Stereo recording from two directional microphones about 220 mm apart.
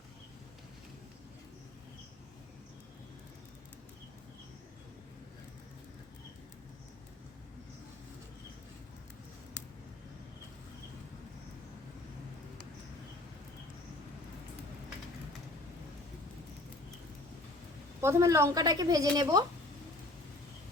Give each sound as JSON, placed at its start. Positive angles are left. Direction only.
{"t": 18.0, "sound": "a woman's voice", "side_deg": -15}